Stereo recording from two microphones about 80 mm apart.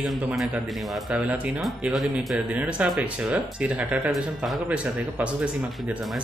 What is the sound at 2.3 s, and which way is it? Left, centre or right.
Speech, centre.